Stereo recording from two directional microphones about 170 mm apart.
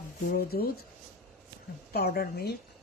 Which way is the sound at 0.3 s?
65° left (ahead or behind).